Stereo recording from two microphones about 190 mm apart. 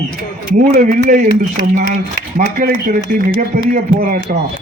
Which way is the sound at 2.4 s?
45° right (ahead or behind).